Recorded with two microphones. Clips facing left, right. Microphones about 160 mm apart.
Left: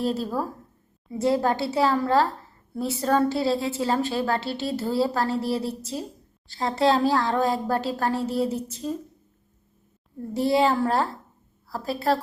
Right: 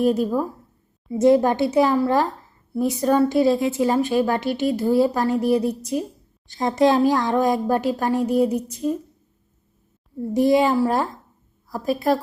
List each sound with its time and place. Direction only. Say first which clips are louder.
0.0 s a woman's voice: right 6 dB; 15° right (ahead or behind)
10.3 s a woman's voice: right 4 dB; 15° right (ahead or behind)